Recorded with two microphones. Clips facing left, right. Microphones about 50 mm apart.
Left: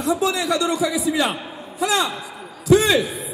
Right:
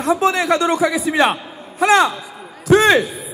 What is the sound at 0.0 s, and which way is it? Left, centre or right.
A man's voice, right.